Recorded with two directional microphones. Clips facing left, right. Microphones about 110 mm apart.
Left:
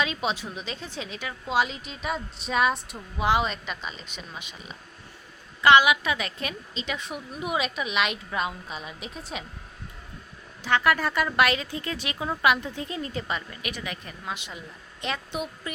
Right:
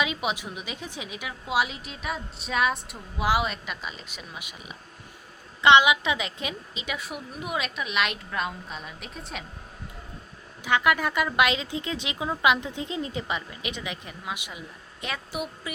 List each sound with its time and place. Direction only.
0.0 s a woman's voice: 15° right (ahead or behind)
5.6 s a woman's voice: 20° right (ahead or behind); by 9.4 s centre (ahead or behind)
10.6 s a woman's voice: 15° right (ahead or behind)